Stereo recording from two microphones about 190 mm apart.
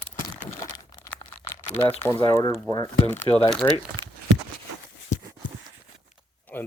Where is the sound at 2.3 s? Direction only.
15° left (ahead or behind).